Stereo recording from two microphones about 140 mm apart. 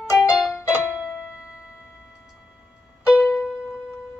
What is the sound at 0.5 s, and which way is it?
Music, 15° left (ahead or behind).